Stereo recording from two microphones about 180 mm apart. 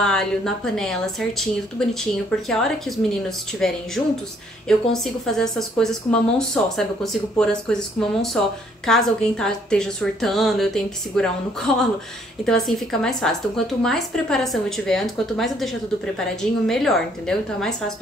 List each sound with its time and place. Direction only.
0.0 s speech: 5° left (ahead or behind)